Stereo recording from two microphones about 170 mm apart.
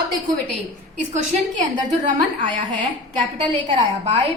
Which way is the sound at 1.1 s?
45° right (ahead or behind).